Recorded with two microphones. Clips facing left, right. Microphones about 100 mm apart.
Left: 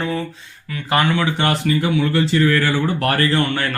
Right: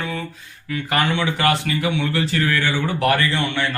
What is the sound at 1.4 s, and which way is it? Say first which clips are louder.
Speech: left 1 dB; 35° left (ahead or behind).